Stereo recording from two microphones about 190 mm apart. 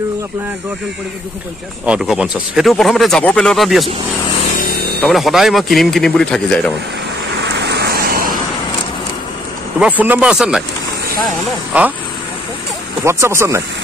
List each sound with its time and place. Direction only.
1.9 s speech: 5° right (ahead or behind)
5.0 s speech: centre (ahead or behind)
7.3 s vehicle: 65° right (ahead or behind); by 8.4 s 50° right (ahead or behind)
9.8 s speech: 10° right (ahead or behind)
11.7 s speech: 5° right (ahead or behind)
13.0 s speech: 15° right (ahead or behind)